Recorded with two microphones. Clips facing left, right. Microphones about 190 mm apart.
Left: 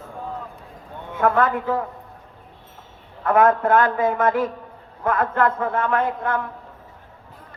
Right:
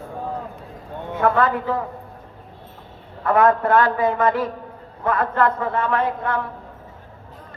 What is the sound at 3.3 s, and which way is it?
A man's voice, 50° left (ahead or behind).